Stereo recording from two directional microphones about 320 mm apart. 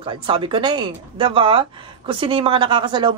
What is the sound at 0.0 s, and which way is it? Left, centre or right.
Speech, centre.